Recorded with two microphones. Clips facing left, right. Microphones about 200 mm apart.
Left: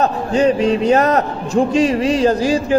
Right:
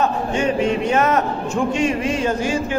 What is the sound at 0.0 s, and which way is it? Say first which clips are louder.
A man's voice: left 5 dB; 35° left (ahead or behind).